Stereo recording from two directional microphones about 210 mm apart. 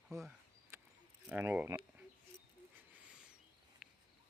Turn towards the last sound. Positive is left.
turn(degrees=0)  # may be behind; listen again after turning